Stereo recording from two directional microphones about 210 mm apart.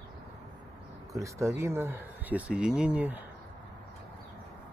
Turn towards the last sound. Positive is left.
turn(degrees=-5)  # may be behind; listen again after turning